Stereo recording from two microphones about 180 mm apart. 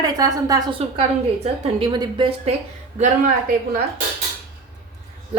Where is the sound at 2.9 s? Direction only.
50° right (ahead or behind).